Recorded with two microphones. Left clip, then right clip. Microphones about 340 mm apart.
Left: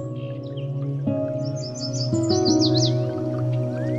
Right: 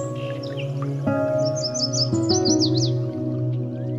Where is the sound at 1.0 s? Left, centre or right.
Centre.